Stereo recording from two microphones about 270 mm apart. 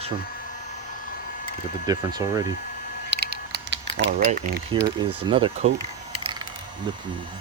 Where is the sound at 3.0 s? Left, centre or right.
Right.